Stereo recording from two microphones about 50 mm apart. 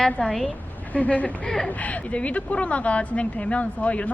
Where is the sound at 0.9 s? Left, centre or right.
Left.